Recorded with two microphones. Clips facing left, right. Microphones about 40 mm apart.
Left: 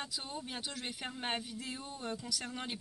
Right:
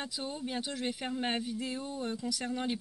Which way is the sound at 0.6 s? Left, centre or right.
Right.